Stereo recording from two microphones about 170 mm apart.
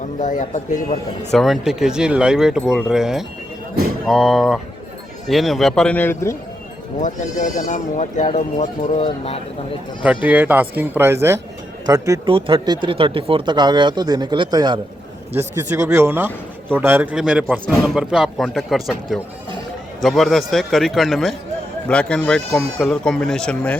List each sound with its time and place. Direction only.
0.2 s speech: 45° left (ahead or behind)
1.3 s a man's voice: centre (ahead or behind)
7.0 s speech: 45° left (ahead or behind)
10.0 s a man's voice: 10° right (ahead or behind)
20.0 s a man's voice: centre (ahead or behind)